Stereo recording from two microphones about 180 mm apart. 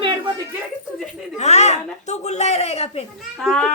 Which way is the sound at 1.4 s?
40° left (ahead or behind).